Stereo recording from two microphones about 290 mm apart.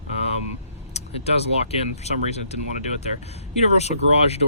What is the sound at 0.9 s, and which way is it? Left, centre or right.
Speech, left.